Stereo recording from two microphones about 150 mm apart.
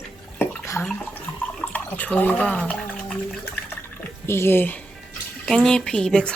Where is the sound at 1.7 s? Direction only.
10° left (ahead or behind).